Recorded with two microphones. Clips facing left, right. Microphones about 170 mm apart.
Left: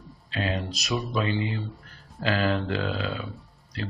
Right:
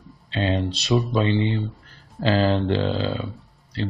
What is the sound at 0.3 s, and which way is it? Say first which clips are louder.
Speech: right 6 dB; 25° right (ahead or behind).